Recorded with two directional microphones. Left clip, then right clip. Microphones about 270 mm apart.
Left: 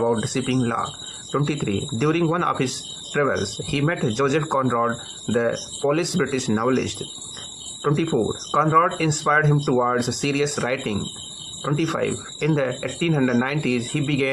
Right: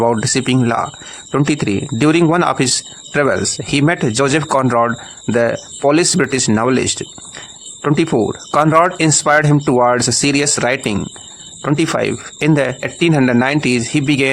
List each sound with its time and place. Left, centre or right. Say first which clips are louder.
0.0 s speech: right 7 dB; right